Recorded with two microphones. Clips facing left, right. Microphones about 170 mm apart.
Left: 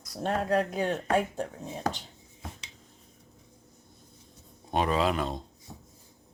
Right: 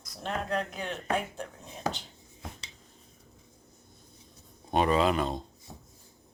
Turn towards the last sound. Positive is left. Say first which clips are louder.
# right 2 dB
turn(degrees=0)  # may be behind; listen again after turning